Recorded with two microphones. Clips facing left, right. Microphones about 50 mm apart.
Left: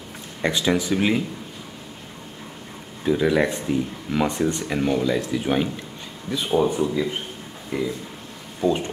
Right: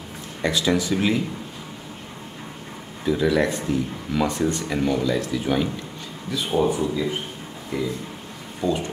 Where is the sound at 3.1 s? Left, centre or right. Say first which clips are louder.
Left 1 dB; centre.